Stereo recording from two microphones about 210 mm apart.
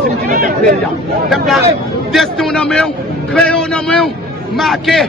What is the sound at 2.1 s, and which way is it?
Speech, centre (ahead or behind).